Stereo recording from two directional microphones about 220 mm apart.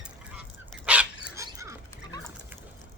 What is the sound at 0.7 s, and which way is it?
Dog, 5° right (ahead or behind).